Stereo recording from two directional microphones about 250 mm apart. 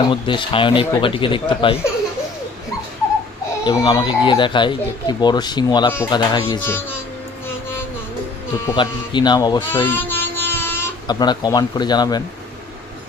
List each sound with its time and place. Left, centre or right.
0.1 s speech: centre
3.7 s speech: centre
7.4 s music: centre
8.6 s speech: centre